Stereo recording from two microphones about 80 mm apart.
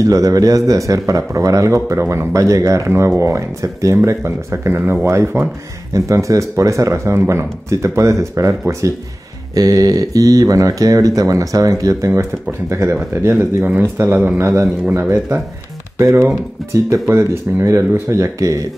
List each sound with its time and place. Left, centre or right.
0.0 s speech: right